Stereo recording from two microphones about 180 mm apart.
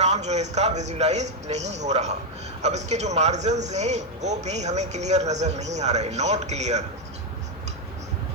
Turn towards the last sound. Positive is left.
turn(degrees=-40)  # may be behind; listen again after turning